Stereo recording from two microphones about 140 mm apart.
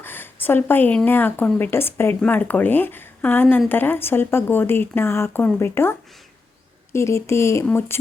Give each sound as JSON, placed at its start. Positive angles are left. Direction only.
{"t": 0.0, "sound": "a woman's voice", "side_deg": 15}
{"t": 6.9, "sound": "speech", "side_deg": 20}